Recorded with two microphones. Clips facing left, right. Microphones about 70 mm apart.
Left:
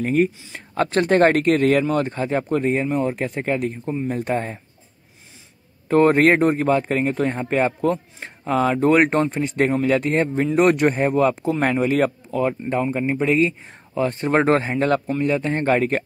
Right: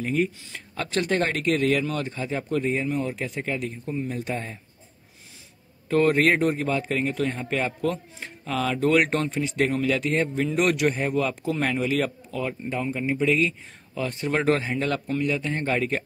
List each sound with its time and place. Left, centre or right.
0.0 s speech: left
5.9 s a man's voice: left